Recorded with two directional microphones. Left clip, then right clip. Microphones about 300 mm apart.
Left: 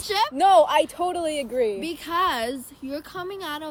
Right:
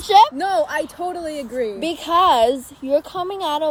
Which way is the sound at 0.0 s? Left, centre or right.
Centre.